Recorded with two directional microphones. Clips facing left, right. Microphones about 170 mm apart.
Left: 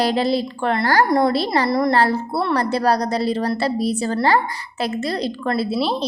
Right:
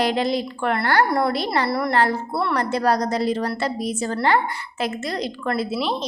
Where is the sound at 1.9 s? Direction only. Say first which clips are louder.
Left 3 dB; 35° left (ahead or behind).